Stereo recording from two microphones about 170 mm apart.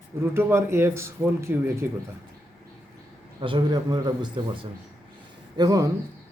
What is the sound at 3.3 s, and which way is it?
Speech, 30° right (ahead or behind).